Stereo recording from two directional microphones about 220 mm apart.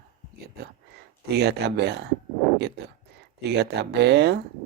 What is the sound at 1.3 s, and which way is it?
Speech, 45° right (ahead or behind).